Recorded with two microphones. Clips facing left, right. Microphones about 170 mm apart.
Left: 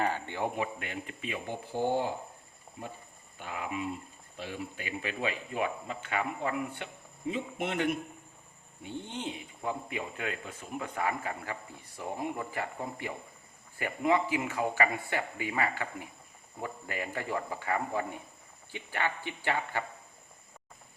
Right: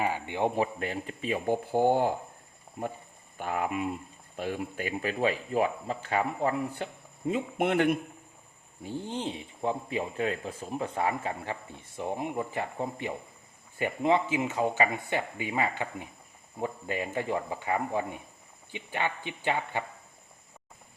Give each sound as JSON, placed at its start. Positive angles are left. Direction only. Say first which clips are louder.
{"t": 0.0, "sound": "speech", "louder": "right 3 dB", "side_deg": -15}
{"t": 0.5, "sound": "speech", "louder": "right 5 dB", "side_deg": -35}
{"t": 3.3, "sound": "speech", "louder": "right 6 dB", "side_deg": -50}
{"t": 7.3, "sound": "speech", "louder": "right 6 dB", "side_deg": -50}
{"t": 8.8, "sound": "speech", "louder": "right 4 dB", "side_deg": -35}